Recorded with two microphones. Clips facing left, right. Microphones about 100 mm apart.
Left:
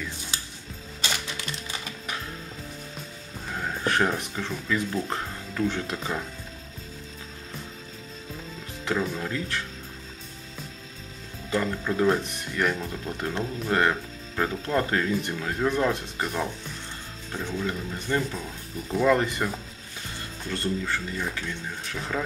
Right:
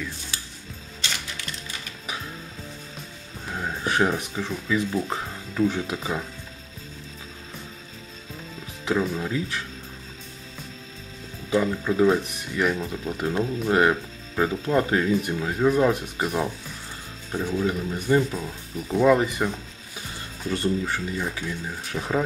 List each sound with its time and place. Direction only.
3.4 s speech: 5° right (ahead or behind)
8.8 s speech: 5° right (ahead or behind)
11.5 s speech: 5° right (ahead or behind)
20.4 s speech: 15° right (ahead or behind)